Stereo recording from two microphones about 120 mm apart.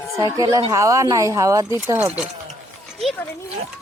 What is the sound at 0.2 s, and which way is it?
Speech, 25° right (ahead or behind).